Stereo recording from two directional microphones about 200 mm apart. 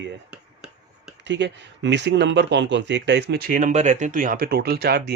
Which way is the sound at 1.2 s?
60° right (ahead or behind).